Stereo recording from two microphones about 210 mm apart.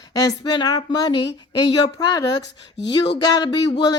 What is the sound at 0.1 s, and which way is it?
Speech, 15° left (ahead or behind).